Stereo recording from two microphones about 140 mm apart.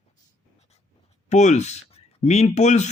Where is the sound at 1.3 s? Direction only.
55° left (ahead or behind).